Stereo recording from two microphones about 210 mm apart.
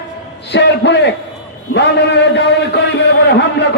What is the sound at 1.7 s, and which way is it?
A man's voice, 55° left (ahead or behind).